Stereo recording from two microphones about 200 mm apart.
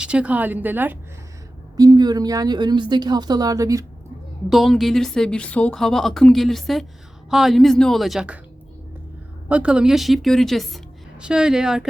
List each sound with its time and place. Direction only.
0.0 s a woman's voice: 5° right (ahead or behind)
4.4 s a woman's voice: centre (ahead or behind)
9.5 s a woman's voice: 5° right (ahead or behind)